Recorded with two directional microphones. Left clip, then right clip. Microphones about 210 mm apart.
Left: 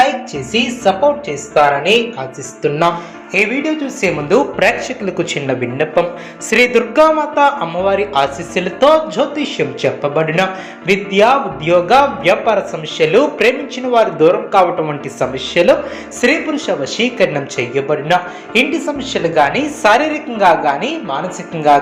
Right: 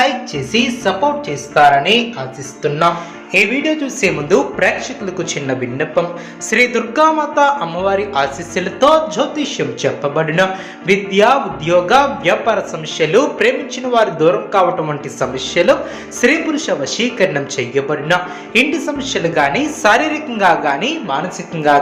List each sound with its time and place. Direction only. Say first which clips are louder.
0.5 s speech: left 2 dB; centre (ahead or behind)
3.3 s speech: right 1 dB; centre (ahead or behind)
4.5 s a man's voice: left 2 dB; 20° left (ahead or behind); by 21.8 s centre (ahead or behind)